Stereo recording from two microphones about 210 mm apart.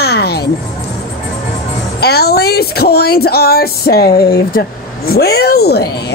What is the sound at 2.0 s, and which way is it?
A woman's voice, 50° left (ahead or behind).